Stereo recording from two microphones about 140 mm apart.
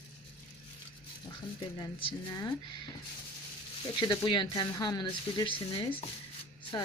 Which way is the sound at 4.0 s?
35° left (ahead or behind).